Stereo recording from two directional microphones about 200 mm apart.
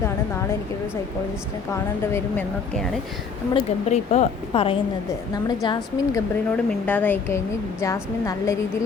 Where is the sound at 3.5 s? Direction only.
35° left (ahead or behind).